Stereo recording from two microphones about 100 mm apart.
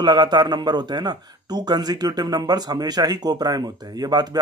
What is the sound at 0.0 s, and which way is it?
A man's voice, 50° right (ahead or behind).